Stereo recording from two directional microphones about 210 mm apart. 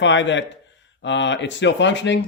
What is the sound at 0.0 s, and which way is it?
Speech, 60° left (ahead or behind).